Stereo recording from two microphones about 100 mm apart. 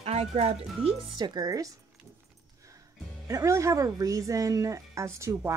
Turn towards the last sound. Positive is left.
turn(degrees=-30)  # may be behind; listen again after turning